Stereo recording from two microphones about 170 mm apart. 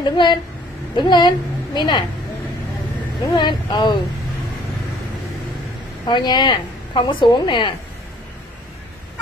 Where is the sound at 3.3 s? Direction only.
25° left (ahead or behind).